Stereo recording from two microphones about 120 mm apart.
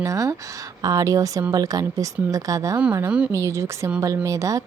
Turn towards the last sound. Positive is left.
turn(degrees=-25)  # may be behind; listen again after turning